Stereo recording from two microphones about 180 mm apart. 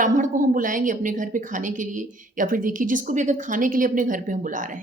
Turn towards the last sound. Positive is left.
turn(degrees=-45)  # may be behind; listen again after turning